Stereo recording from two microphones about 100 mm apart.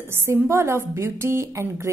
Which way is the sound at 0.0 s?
25° right (ahead or behind).